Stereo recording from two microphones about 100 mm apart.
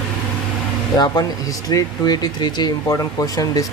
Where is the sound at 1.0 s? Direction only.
40° left (ahead or behind).